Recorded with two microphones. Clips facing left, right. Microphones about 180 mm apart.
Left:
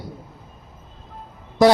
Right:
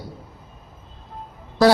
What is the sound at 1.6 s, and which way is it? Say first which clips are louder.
Speech: left 1 dB; 20° left (ahead or behind).